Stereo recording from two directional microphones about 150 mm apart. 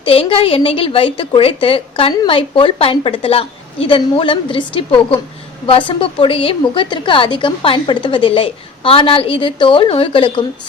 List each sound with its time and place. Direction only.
0.0 s a woman's voice: 35° left (ahead or behind)